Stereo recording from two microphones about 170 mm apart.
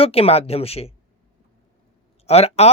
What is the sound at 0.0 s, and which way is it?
Speech, 35° left (ahead or behind).